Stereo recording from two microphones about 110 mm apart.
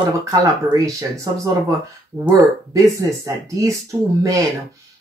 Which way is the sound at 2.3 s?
30° right (ahead or behind).